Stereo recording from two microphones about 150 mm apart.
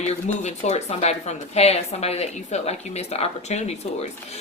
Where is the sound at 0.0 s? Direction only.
50° left (ahead or behind).